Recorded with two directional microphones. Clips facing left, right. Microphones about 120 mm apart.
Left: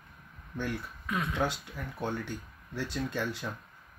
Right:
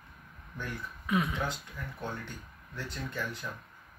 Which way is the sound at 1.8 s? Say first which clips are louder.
Left 2 dB; 80° left.